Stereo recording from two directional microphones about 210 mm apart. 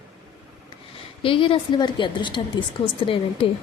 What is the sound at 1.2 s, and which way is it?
A woman's voice, 25° left (ahead or behind).